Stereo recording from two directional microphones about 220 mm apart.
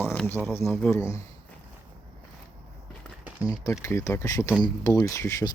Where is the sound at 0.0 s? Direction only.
10° left (ahead or behind).